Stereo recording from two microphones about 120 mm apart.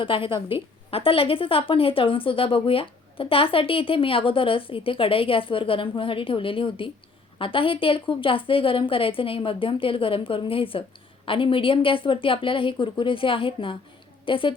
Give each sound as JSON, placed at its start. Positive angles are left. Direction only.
{"t": 0.0, "sound": "a woman's voice", "side_deg": 45}